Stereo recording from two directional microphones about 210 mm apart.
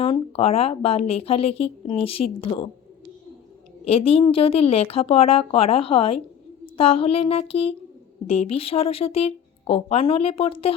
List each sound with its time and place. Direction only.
0.0 s speech: 30° left (ahead or behind)
3.8 s speech: 25° left (ahead or behind)